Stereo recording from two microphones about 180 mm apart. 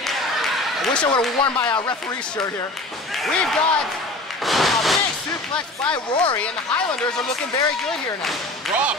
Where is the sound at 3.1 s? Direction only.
Centre (ahead or behind).